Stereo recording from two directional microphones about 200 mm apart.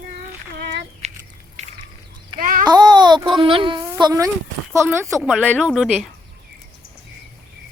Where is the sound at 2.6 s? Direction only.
20° right (ahead or behind).